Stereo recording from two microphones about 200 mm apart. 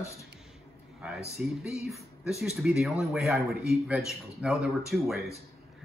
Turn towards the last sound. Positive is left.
turn(degrees=0)  # may be behind; listen again after turning